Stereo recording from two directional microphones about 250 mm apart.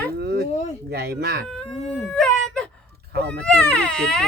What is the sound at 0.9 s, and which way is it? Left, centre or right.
Speech, right.